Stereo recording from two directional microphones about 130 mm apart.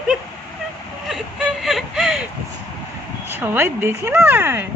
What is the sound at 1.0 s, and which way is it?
Speech, 5° right (ahead or behind).